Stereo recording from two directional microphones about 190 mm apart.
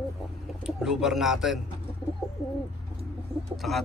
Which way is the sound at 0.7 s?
5° right (ahead or behind).